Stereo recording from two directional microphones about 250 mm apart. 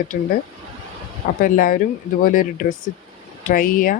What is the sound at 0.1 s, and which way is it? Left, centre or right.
Speech, left.